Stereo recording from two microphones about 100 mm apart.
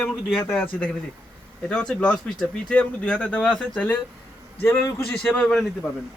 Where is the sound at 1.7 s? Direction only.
10° left (ahead or behind).